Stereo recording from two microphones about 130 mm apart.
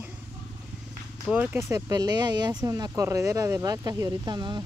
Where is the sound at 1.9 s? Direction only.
30° right (ahead or behind).